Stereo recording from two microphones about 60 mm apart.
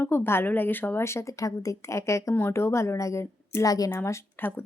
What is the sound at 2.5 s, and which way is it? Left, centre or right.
Speech, left.